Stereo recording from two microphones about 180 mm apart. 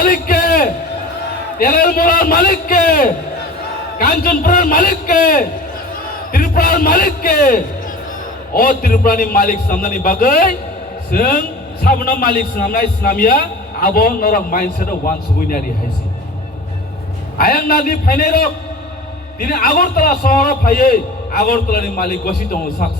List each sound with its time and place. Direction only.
0.0 s a sound: 55° left (ahead or behind)
1.5 s a man's voice: 55° left (ahead or behind)
17.3 s a man's voice: 55° left (ahead or behind)